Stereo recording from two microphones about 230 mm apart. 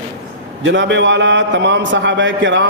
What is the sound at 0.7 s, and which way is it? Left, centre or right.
A man's voice, right.